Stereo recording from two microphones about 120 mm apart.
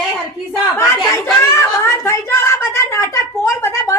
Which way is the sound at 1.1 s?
20° left (ahead or behind).